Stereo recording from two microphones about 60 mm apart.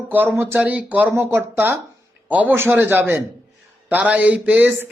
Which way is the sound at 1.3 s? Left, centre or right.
Right.